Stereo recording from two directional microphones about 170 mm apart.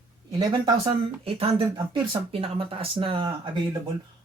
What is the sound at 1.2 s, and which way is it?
Speech, 35° right (ahead or behind).